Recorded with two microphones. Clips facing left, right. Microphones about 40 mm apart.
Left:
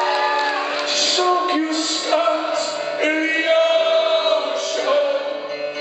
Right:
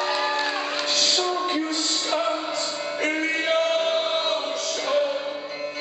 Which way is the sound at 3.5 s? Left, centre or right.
Left.